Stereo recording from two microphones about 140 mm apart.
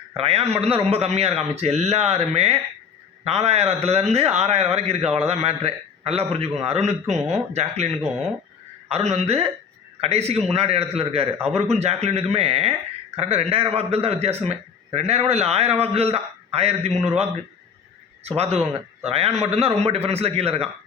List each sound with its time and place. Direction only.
0.2 s a man's voice: 45° right (ahead or behind)